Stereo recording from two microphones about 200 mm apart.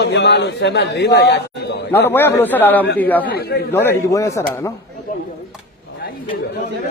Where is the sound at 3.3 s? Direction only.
50° left (ahead or behind).